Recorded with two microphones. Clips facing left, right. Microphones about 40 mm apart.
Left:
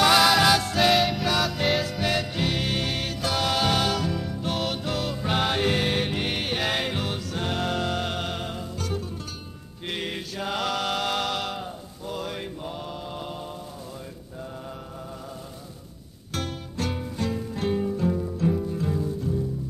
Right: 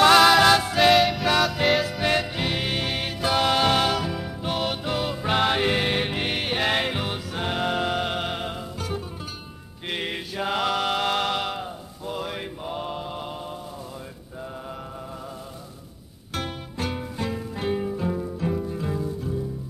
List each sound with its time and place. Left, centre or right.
0.0 s music: centre
16.3 s music: centre